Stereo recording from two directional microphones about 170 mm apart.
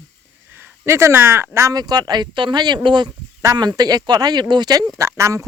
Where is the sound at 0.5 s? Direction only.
10° right (ahead or behind).